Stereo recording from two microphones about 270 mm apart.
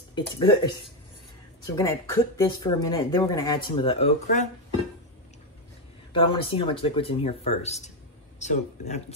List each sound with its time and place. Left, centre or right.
0.1 s speech: centre
1.8 s speech: centre
6.1 s speech: centre